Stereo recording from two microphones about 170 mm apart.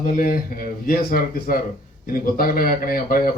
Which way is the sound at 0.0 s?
55° left (ahead or behind).